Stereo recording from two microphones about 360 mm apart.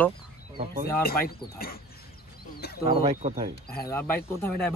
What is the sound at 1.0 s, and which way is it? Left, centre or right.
Speech, left.